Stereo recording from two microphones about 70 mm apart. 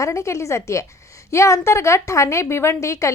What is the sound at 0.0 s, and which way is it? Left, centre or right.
A woman's voice, left.